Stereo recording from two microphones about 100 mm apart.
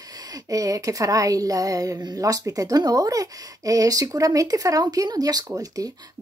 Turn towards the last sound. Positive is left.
turn(degrees=-35)  # may be behind; listen again after turning